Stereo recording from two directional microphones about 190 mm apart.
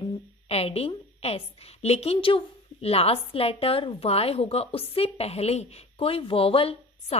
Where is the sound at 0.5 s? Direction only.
30° left (ahead or behind).